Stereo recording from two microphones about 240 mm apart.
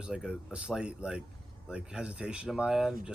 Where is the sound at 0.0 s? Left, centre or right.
Centre.